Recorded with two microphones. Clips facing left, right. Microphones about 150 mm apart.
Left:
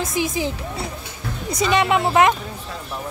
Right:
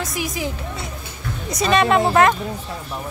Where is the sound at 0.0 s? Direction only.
25° left (ahead or behind).